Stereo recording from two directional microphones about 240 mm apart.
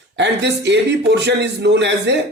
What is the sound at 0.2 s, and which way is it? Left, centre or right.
A man's voice, right.